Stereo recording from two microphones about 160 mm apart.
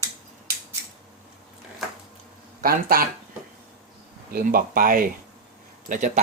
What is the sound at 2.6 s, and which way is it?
Speech, 65° right (ahead or behind).